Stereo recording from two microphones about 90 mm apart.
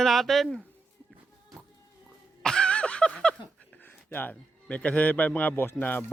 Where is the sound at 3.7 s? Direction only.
20° left (ahead or behind).